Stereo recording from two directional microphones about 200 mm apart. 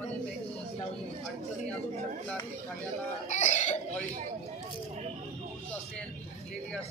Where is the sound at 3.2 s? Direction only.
35° left (ahead or behind).